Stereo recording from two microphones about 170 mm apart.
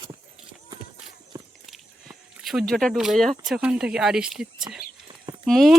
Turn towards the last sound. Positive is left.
turn(degrees=0)  # may be behind; listen again after turning